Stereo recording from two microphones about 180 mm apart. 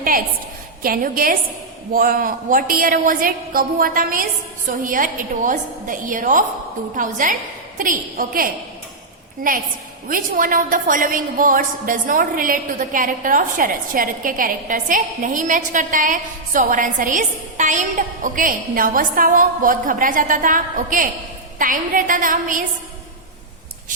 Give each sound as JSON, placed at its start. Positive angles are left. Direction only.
{"t": 0.8, "sound": "a woman's voice", "side_deg": -55}